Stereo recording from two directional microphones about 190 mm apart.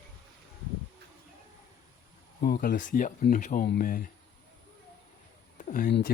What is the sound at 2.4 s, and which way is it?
Speech, 50° left (ahead or behind).